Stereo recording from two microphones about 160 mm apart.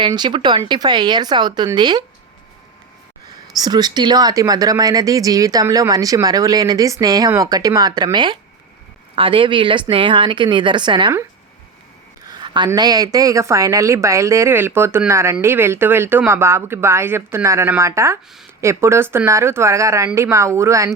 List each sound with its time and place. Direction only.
0.0 s speech: 30° right (ahead or behind)
3.6 s speech: 25° right (ahead or behind)
12.2 s a woman's voice: 25° right (ahead or behind)